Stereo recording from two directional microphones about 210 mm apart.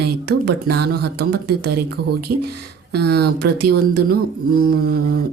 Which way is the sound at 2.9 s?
50° right (ahead or behind).